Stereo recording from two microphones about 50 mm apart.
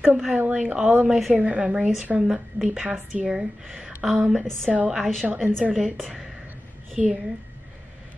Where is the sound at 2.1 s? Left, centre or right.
Centre.